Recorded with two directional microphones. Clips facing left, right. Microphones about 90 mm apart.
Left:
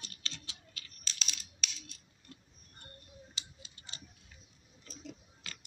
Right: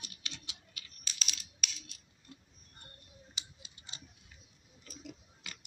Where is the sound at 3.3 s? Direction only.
20° right (ahead or behind).